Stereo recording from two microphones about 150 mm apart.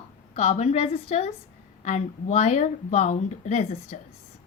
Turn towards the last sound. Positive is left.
turn(degrees=50)  # may be behind; listen again after turning